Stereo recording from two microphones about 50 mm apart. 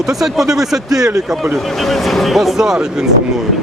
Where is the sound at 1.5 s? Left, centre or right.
Centre.